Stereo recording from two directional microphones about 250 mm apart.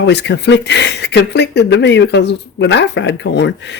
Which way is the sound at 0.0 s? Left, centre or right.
Left.